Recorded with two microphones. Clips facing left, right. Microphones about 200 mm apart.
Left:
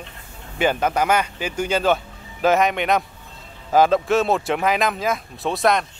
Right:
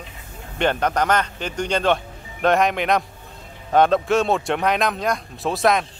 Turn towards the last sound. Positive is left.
turn(degrees=0)  # may be behind; listen again after turning